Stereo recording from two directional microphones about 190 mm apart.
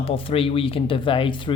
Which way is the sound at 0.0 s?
30° left (ahead or behind).